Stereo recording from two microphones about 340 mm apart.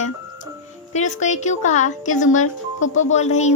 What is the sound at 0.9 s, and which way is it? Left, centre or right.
Speech, left.